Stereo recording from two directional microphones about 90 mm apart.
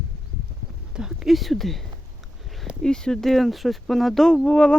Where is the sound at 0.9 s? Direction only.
5° right (ahead or behind).